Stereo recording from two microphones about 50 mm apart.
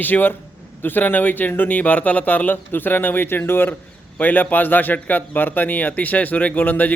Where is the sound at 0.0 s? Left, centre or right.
Left.